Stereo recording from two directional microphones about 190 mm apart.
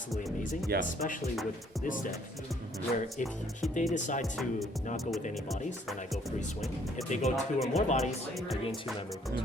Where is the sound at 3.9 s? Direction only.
40° left (ahead or behind).